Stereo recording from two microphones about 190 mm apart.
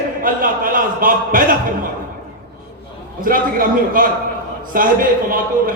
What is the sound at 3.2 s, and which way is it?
A man's voice, 45° right (ahead or behind).